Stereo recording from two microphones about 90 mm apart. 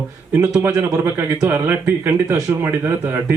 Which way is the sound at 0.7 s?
30° right (ahead or behind).